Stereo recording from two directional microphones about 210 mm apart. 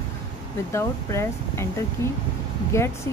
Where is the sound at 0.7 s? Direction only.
15° left (ahead or behind).